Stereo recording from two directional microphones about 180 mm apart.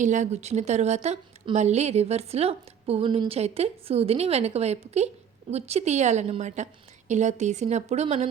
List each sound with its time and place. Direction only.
0.0 s a woman's voice: 45° right (ahead or behind)